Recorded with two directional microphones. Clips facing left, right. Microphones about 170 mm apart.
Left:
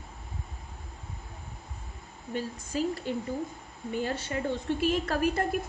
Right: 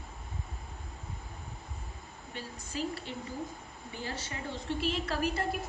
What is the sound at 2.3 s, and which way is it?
Speech, 45° left (ahead or behind).